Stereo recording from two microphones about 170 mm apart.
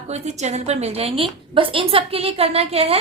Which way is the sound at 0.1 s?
40° right (ahead or behind).